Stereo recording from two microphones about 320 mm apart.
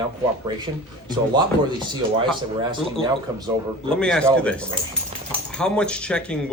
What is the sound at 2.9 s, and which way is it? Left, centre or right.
Speech, centre.